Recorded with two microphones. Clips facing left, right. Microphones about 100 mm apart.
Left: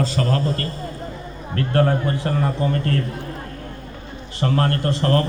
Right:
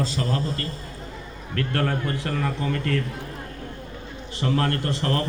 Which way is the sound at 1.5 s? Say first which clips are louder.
Left 6 dB; 30° left (ahead or behind).